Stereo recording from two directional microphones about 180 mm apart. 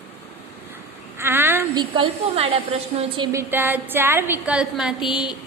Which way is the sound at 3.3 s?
10° right (ahead or behind).